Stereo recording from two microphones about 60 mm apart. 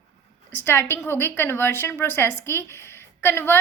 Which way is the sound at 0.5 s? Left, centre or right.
Left.